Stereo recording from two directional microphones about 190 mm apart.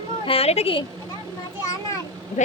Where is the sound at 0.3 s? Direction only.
30° left (ahead or behind).